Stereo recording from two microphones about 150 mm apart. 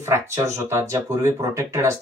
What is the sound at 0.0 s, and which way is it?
Speech, 20° right (ahead or behind).